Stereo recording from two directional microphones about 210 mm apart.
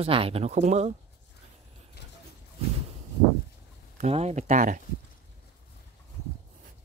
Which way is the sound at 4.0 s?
30° right (ahead or behind).